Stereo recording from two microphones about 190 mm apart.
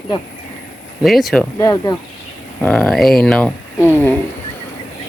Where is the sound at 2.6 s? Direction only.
5° left (ahead or behind).